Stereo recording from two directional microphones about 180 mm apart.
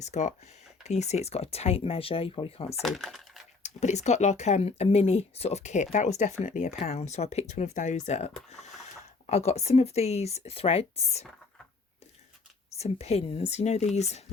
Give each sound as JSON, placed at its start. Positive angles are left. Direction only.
{"t": 0.0, "sound": "speech", "side_deg": 40}
{"t": 2.8, "sound": "speech", "side_deg": 0}
{"t": 3.6, "sound": "speech", "side_deg": 40}
{"t": 12.8, "sound": "speech", "side_deg": 35}